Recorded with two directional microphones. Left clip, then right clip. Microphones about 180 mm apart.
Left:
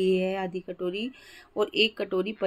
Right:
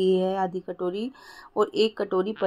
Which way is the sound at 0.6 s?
20° left (ahead or behind).